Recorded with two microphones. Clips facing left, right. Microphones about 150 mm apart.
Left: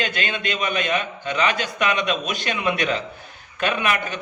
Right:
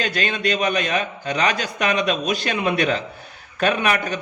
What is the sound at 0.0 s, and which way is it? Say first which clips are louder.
A man's voice: right 3 dB; 40° right (ahead or behind).